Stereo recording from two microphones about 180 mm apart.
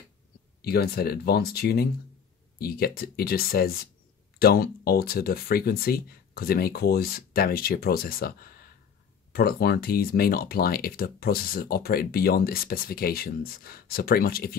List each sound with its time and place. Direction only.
0.6 s speech: 60° left (ahead or behind)